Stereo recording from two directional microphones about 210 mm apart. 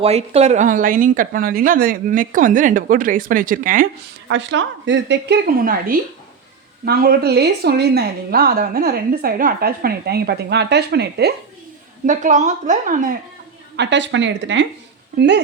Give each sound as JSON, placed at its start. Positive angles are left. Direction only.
{"t": 0.0, "sound": "speech", "side_deg": -30}
{"t": 4.3, "sound": "a woman's voice", "side_deg": -60}
{"t": 12.0, "sound": "speech", "side_deg": -35}
{"t": 13.7, "sound": "a woman's voice", "side_deg": -60}